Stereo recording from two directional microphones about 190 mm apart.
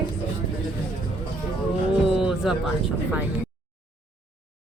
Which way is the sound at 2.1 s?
Centre (ahead or behind).